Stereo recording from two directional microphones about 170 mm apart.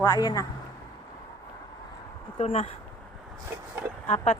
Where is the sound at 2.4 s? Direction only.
40° left (ahead or behind).